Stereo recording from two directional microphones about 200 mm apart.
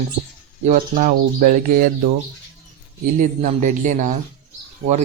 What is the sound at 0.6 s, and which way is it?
Speech, 40° right (ahead or behind).